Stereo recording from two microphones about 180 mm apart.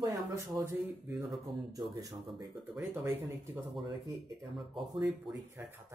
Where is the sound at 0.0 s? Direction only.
15° right (ahead or behind).